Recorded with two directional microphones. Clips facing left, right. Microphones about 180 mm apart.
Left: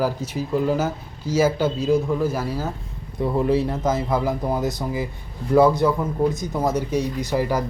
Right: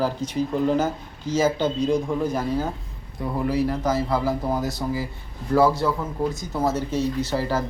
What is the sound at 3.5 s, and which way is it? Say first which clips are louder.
Speech: left 2 dB; 25° left (ahead or behind).